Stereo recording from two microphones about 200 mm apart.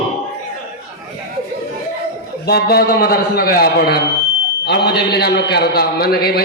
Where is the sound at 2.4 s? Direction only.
50° left (ahead or behind).